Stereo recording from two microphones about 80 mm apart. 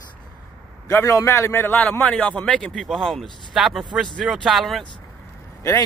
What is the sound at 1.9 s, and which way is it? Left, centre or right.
Speech, centre.